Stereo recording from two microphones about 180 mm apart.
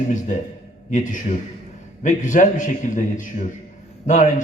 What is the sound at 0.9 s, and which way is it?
A man's voice, 45° left (ahead or behind).